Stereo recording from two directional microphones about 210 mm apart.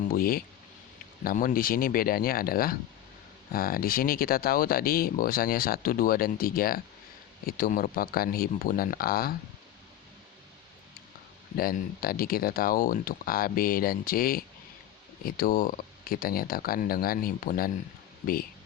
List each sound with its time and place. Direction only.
0.1 s speech: 45° left (ahead or behind)
11.5 s speech: 45° left (ahead or behind)